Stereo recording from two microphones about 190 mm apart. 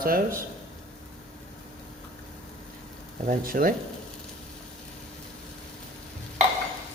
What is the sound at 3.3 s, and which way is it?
Speech, 45° right (ahead or behind).